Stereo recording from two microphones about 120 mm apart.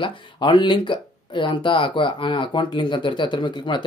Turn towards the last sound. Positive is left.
turn(degrees=40)  # may be behind; listen again after turning